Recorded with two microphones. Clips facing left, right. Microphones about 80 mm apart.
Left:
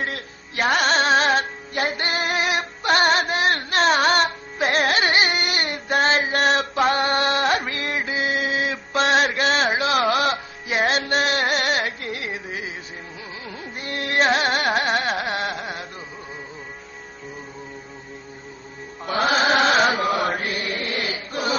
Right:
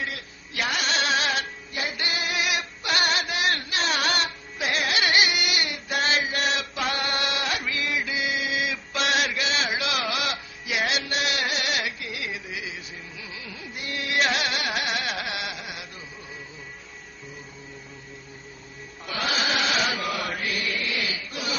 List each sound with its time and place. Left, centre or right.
0.0 s music: left
13.5 s carnatic music: left
19.0 s chant: left